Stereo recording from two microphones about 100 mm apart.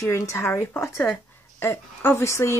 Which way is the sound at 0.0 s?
30° left (ahead or behind).